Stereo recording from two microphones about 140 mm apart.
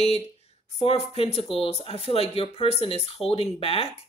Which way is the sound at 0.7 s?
45° left (ahead or behind).